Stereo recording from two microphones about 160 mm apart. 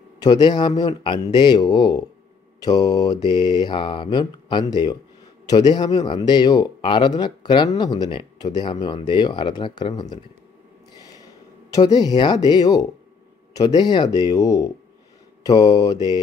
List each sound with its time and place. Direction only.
0.2 s speech: 25° left (ahead or behind)
11.0 s a sound: 20° left (ahead or behind)
11.7 s speech: 25° left (ahead or behind)